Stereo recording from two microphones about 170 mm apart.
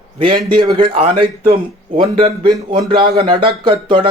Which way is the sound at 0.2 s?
30° right (ahead or behind).